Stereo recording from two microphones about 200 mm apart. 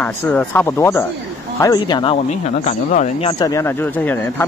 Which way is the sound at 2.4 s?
35° left (ahead or behind).